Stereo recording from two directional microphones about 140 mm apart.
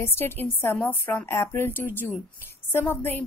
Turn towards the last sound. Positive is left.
turn(degrees=15)  # may be behind; listen again after turning